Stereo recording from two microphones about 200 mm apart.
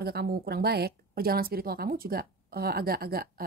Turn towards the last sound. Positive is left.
turn(degrees=-50)  # may be behind; listen again after turning